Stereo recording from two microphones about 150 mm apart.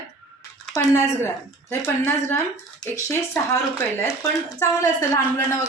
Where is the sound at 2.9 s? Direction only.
20° left (ahead or behind).